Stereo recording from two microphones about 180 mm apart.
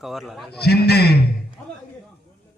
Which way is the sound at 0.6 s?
65° left (ahead or behind).